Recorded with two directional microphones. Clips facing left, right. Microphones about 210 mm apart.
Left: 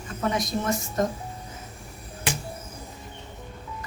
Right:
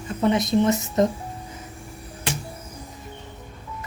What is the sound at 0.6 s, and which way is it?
Speech, 20° right (ahead or behind).